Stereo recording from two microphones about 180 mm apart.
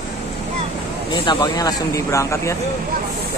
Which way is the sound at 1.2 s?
25° left (ahead or behind).